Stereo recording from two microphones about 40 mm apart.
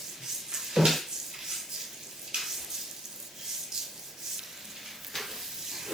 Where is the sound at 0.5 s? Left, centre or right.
Centre.